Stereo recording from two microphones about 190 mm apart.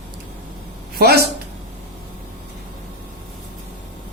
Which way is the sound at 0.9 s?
55° right (ahead or behind).